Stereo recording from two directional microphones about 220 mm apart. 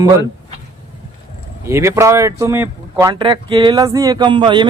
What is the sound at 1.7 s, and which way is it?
Speech, 10° right (ahead or behind).